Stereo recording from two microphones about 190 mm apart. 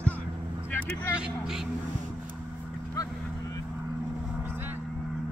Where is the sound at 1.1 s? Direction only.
5° right (ahead or behind).